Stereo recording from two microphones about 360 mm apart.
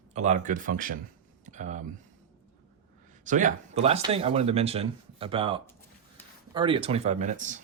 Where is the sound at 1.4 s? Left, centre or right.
Centre.